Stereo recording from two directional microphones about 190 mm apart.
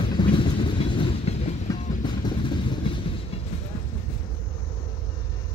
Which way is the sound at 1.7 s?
20° left (ahead or behind).